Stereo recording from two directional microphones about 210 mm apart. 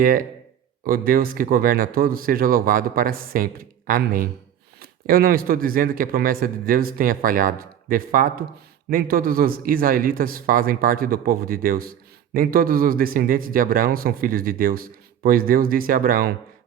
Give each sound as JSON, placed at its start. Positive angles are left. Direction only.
{"t": 0.0, "sound": "a man's voice", "side_deg": -40}